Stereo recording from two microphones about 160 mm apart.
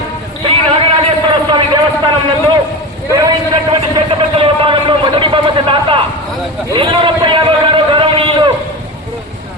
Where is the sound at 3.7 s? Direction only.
30° right (ahead or behind).